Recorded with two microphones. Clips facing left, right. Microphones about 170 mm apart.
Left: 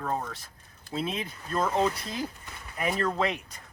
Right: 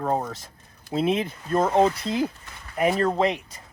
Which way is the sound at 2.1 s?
60° right (ahead or behind).